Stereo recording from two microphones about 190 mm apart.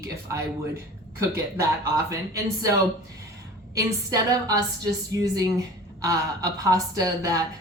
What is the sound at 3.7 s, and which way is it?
Speech, 20° right (ahead or behind).